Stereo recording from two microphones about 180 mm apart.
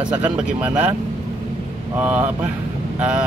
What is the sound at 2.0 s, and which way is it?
Speech, 10° right (ahead or behind).